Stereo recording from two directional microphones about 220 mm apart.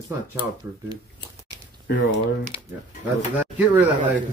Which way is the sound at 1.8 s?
55° left (ahead or behind).